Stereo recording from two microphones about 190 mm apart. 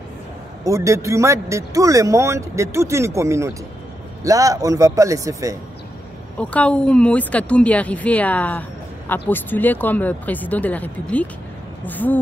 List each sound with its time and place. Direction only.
0.7 s speech: 15° right (ahead or behind)
6.3 s speech: 5° left (ahead or behind)